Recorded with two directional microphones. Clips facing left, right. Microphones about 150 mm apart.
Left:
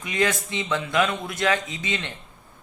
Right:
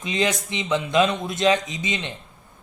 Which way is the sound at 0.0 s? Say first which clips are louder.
Right 1 dB; 20° right (ahead or behind).